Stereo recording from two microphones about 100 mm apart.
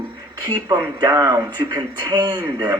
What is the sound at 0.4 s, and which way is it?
Speech, 35° right (ahead or behind).